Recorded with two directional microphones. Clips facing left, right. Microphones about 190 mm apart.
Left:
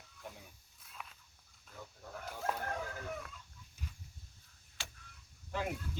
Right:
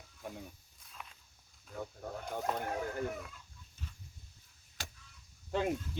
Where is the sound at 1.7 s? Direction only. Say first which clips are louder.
Right 8 dB; 55° right (ahead or behind).